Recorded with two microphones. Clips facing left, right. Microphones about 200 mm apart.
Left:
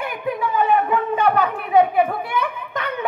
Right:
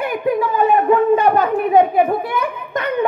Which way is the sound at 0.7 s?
40° right (ahead or behind).